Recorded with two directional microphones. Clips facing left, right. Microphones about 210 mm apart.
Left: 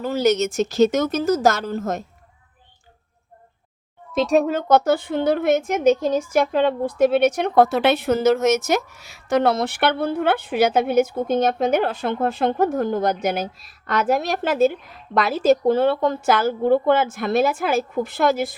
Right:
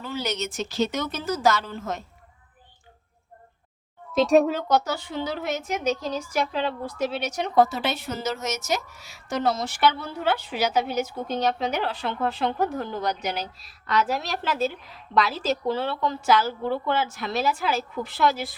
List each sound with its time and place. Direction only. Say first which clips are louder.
0.0 s a woman's voice: left 11 dB; 45° left (ahead or behind)
4.1 s speech: left 1 dB; centre (ahead or behind)
4.7 s a woman's voice: left 7 dB; 55° left (ahead or behind)